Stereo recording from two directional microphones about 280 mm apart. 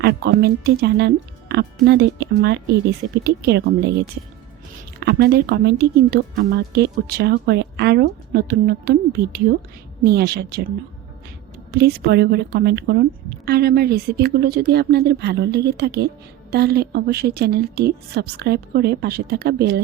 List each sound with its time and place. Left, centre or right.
0.0 s a woman's voice: right
11.7 s a woman's voice: right